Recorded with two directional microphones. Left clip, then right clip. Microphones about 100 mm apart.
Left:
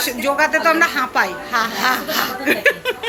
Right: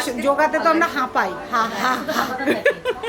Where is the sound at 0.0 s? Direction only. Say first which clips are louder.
Left 1 dB; 20° right (ahead or behind).